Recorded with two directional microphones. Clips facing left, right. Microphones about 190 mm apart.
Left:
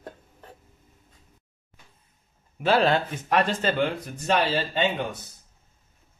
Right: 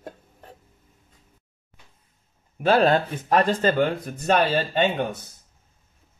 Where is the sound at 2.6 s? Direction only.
50° right (ahead or behind).